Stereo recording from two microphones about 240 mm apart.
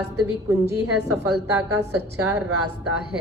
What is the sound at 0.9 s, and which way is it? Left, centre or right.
Speech, right.